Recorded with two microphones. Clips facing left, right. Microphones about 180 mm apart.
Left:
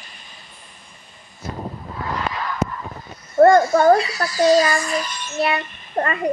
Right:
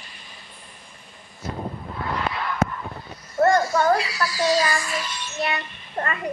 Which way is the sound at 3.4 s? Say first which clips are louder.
Left 6 dB; 50° left (ahead or behind).